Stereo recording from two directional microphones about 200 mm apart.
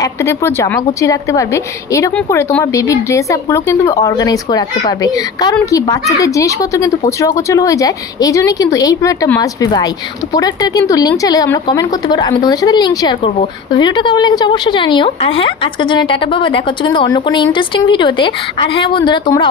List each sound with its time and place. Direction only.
0.0 s speech: 15° left (ahead or behind)